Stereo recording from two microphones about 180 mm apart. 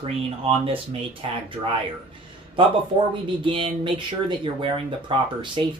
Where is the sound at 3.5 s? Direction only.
30° right (ahead or behind).